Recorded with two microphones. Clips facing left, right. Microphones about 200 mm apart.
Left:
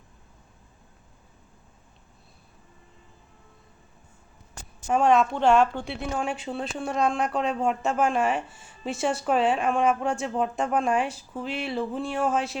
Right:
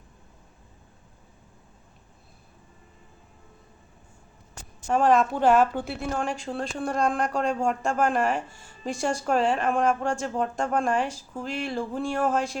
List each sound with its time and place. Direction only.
4.9 s a woman's voice: centre (ahead or behind)